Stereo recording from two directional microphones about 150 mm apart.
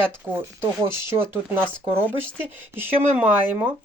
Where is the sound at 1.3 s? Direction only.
15° right (ahead or behind).